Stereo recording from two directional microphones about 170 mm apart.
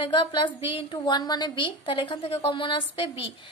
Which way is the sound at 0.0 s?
30° left (ahead or behind).